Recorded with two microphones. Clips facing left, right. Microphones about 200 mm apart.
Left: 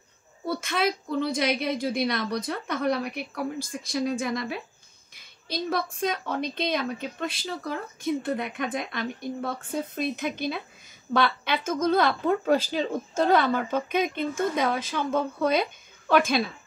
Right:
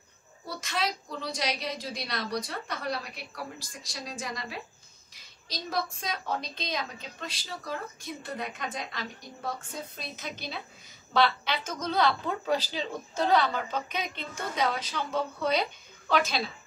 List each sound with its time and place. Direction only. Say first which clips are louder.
0.5 s a woman's voice: left 6 dB; 55° left (ahead or behind)